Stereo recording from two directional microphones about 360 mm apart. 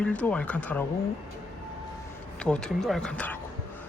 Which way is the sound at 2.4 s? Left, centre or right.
Centre.